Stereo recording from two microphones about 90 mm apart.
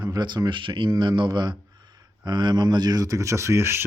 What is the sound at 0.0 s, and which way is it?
Speech, 55° right (ahead or behind).